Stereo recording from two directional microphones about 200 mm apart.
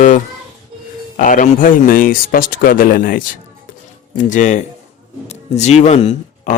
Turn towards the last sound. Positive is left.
turn(degrees=35)  # may be behind; listen again after turning